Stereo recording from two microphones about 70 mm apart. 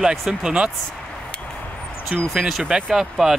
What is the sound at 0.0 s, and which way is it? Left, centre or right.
Speech, centre.